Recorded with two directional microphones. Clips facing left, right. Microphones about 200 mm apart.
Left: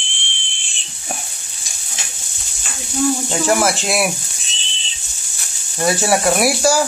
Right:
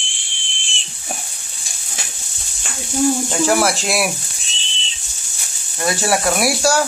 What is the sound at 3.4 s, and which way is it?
Speech, centre (ahead or behind).